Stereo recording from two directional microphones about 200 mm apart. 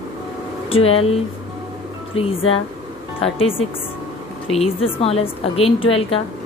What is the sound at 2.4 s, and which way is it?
Speech, 90° left.